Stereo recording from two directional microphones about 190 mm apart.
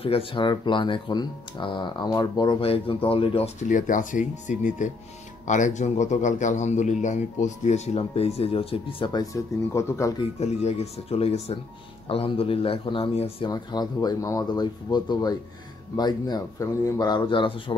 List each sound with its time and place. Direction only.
0.0 s a man's voice: 30° left (ahead or behind)
10.4 s a man's voice: 35° left (ahead or behind)